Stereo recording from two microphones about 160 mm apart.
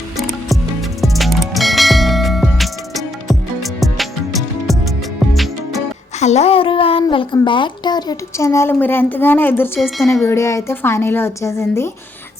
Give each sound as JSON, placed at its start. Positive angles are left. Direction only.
{"t": 0.2, "sound": "music", "side_deg": 0}
{"t": 6.1, "sound": "a child's voice", "side_deg": 45}